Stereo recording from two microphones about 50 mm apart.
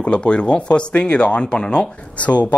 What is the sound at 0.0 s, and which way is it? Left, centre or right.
Speech, left.